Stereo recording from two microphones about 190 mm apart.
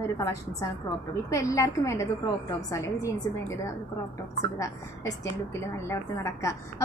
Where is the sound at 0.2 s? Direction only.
15° left (ahead or behind).